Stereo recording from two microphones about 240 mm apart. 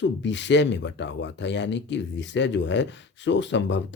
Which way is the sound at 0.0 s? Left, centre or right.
Left.